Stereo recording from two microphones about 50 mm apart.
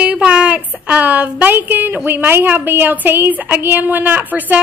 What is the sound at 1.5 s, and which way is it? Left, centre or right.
A woman's voice, right.